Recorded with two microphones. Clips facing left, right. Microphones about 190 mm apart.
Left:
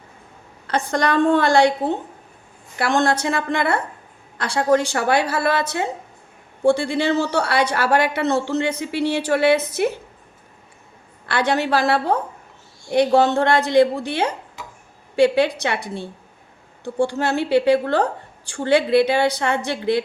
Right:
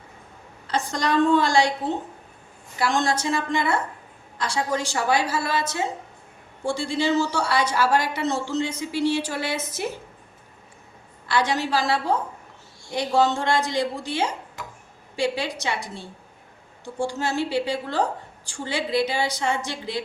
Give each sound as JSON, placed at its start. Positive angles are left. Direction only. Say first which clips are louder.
{"t": 0.7, "sound": "a woman's voice", "louder": "left 4 dB", "side_deg": 60}
{"t": 2.7, "sound": "a woman's voice", "louder": "left 4 dB", "side_deg": 60}
{"t": 11.3, "sound": "a woman's voice", "louder": "left 4 dB", "side_deg": 60}